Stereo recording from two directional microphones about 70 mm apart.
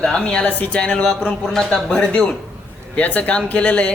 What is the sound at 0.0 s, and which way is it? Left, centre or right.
Speech, centre.